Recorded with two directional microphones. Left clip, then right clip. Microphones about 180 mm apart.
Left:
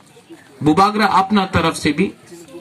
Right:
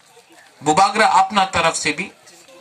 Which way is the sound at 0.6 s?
25° right (ahead or behind).